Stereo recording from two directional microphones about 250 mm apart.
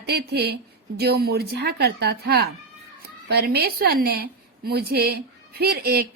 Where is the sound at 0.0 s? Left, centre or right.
Right.